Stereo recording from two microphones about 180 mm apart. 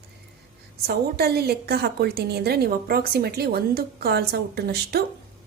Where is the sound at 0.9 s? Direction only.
60° right (ahead or behind).